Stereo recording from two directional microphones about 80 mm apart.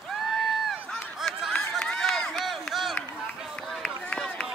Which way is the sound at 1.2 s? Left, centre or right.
Centre.